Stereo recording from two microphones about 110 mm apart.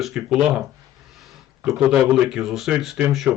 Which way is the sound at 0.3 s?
5° right (ahead or behind).